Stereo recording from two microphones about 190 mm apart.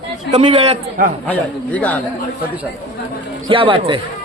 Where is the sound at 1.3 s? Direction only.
10° left (ahead or behind).